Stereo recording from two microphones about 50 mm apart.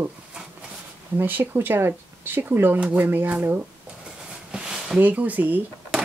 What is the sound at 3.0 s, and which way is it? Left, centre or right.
Speech, right.